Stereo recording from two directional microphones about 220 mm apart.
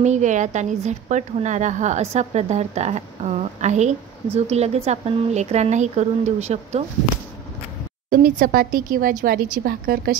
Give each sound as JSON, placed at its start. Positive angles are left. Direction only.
{"t": 0.0, "sound": "a woman's voice", "side_deg": -30}
{"t": 8.1, "sound": "a woman's voice", "side_deg": -40}